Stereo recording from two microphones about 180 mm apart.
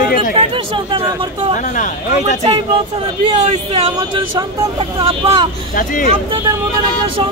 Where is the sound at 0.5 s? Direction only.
30° right (ahead or behind).